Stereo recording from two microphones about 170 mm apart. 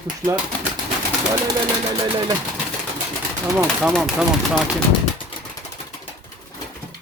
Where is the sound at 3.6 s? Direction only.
Centre (ahead or behind).